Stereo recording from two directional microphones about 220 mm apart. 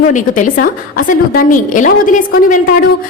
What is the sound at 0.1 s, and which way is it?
A woman's voice, 35° left (ahead or behind).